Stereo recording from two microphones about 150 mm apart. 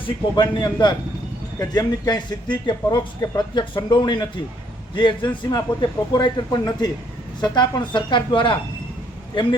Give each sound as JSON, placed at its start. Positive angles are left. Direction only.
{"t": 0.3, "sound": "a man's voice", "side_deg": 30}